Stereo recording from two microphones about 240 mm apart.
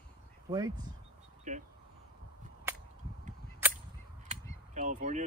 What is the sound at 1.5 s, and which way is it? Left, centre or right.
Speech, right.